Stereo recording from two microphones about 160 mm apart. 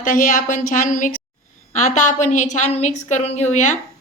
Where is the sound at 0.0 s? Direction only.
55° left (ahead or behind).